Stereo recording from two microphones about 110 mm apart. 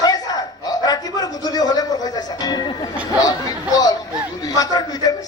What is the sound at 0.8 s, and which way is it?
Music, 35° left (ahead or behind).